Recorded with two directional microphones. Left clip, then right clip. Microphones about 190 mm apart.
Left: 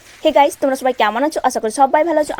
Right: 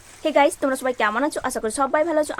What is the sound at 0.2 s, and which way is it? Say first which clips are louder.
A woman's voice: left 5 dB; 20° left (ahead or behind).